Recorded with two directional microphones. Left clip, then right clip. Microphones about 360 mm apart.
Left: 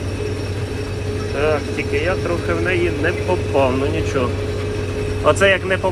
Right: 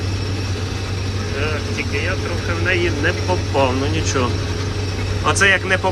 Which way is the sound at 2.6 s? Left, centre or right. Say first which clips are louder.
Right 3 dB; centre.